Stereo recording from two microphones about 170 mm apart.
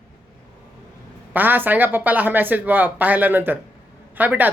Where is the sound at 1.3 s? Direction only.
10° right (ahead or behind).